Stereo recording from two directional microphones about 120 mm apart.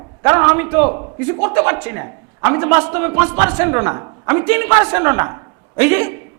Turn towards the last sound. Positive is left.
turn(degrees=-20)  # may be behind; listen again after turning